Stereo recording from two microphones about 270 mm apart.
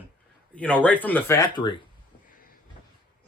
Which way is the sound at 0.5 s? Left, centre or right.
Centre.